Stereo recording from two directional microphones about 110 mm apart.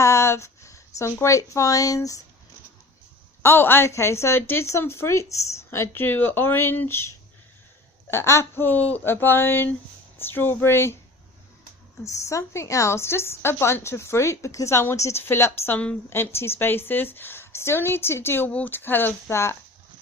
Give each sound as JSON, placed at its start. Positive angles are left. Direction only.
{"t": 0.0, "sound": "speech", "side_deg": 25}
{"t": 3.4, "sound": "a woman's voice", "side_deg": 20}
{"t": 8.1, "sound": "a woman's voice", "side_deg": 25}
{"t": 12.0, "sound": "a woman's voice", "side_deg": 30}